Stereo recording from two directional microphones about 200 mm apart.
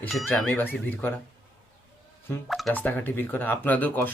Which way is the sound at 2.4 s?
Centre (ahead or behind).